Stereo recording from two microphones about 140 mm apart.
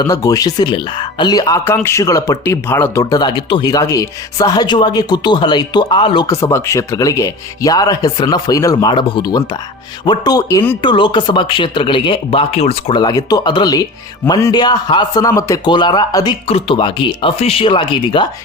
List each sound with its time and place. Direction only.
0.0 s speech: 25° left (ahead or behind)
6.3 s speech: 20° left (ahead or behind); by 13.0 s 45° left (ahead or behind)
13.0 s speech: 30° left (ahead or behind)
16.5 s speech: 40° left (ahead or behind)